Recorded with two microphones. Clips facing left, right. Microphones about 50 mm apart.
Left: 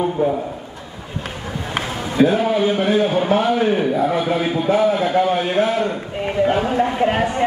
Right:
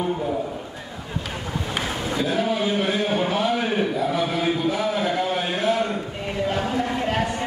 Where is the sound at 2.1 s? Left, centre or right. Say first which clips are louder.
Left 8 dB; left.